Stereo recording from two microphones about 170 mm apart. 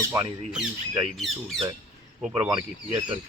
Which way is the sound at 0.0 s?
15° right (ahead or behind).